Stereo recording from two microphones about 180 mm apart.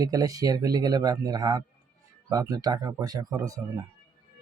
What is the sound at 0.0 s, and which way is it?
Speech, 20° right (ahead or behind).